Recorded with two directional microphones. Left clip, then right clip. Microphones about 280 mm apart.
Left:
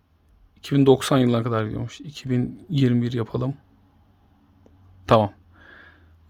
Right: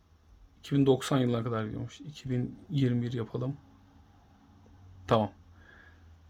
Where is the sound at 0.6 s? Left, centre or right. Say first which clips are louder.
Left 9 dB; left.